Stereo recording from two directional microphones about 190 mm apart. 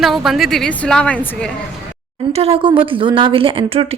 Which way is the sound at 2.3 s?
30° right (ahead or behind).